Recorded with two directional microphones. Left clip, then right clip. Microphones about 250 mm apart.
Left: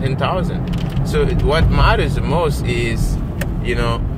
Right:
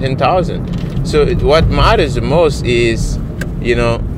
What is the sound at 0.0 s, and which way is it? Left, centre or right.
Speech, right.